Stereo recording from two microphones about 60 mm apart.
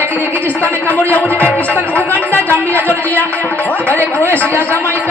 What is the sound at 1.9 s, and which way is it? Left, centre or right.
Speech, left.